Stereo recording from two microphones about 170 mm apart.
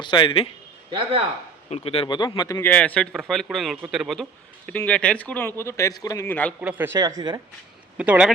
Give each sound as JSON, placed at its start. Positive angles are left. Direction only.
{"t": 0.0, "sound": "speech", "side_deg": 30}
{"t": 0.9, "sound": "speech", "side_deg": -30}
{"t": 1.7, "sound": "speech", "side_deg": 35}
{"t": 2.6, "sound": "a man's voice", "side_deg": 10}
{"t": 6.6, "sound": "speech", "side_deg": -10}
{"t": 7.9, "sound": "speech", "side_deg": -10}